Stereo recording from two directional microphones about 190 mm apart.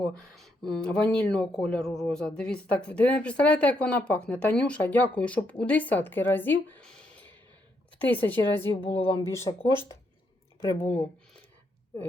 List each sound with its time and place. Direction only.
0.1 s speech: centre (ahead or behind)
9.0 s speech: 30° left (ahead or behind)
9.2 s speech: 15° left (ahead or behind)
10.6 s speech: 10° left (ahead or behind)